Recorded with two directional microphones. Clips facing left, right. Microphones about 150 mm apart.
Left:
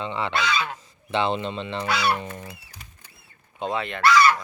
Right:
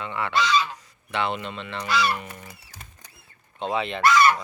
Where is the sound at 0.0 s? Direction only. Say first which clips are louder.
Left 2 dB; 25° left (ahead or behind).